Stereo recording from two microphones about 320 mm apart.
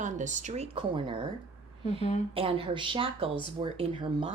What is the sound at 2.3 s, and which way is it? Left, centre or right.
Speech, centre.